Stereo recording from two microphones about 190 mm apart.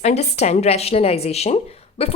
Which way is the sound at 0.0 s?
35° left (ahead or behind).